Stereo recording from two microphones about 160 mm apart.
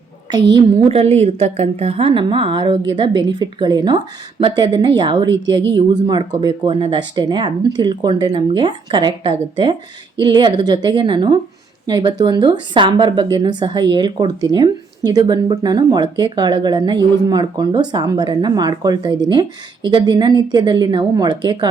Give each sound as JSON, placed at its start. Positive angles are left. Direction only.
{"t": 0.3, "sound": "a woman's voice", "side_deg": -25}
{"t": 0.9, "sound": "a woman's voice", "side_deg": -40}